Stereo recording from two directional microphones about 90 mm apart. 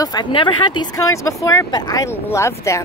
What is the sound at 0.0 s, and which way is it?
Speech, 50° left (ahead or behind).